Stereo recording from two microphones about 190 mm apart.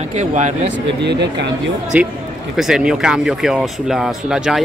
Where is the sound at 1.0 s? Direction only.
65° right (ahead or behind).